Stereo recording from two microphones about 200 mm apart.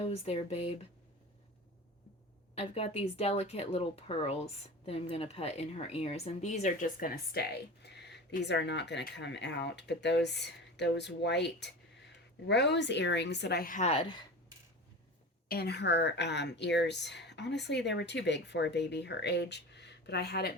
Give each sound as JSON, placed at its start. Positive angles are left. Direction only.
{"t": 0.0, "sound": "a woman's voice", "side_deg": 30}
{"t": 2.6, "sound": "a woman's voice", "side_deg": 30}
{"t": 15.4, "sound": "a woman's voice", "side_deg": 55}